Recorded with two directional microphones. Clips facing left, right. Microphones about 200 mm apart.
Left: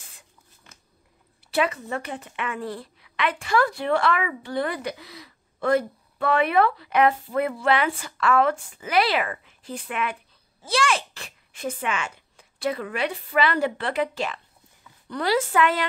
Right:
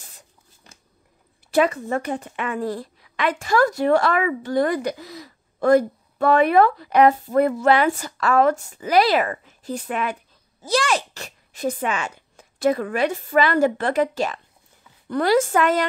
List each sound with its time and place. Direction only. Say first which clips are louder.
1.5 s a woman's voice: right 5 dB; 45° right (ahead or behind)